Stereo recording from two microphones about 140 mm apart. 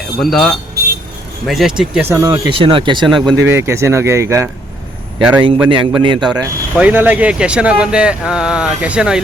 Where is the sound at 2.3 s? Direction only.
40° right (ahead or behind).